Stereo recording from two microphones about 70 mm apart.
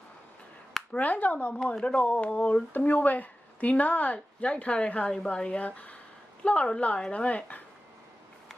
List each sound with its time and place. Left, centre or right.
0.9 s speech: left